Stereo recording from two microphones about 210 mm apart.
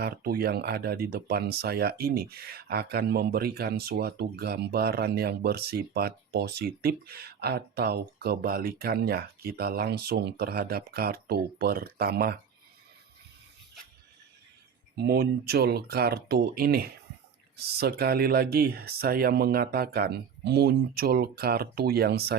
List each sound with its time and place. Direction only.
0.0 s speech: 45° right (ahead or behind)
14.9 s speech: 50° right (ahead or behind)